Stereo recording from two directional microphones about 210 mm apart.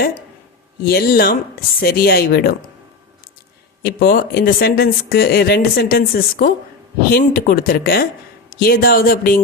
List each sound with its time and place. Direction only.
0.9 s speech: 45° left (ahead or behind)
3.8 s speech: 45° left (ahead or behind)